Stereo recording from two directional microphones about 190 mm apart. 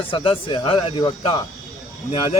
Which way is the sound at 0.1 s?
30° left (ahead or behind).